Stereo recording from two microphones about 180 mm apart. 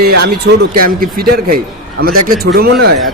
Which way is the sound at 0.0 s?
60° right (ahead or behind).